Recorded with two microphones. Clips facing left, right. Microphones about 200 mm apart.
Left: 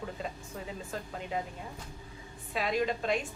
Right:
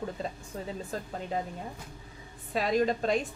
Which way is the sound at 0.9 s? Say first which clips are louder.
Right 2 dB; 40° right (ahead or behind).